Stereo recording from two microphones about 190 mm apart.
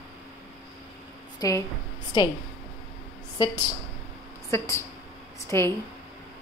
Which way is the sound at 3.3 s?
20° left (ahead or behind).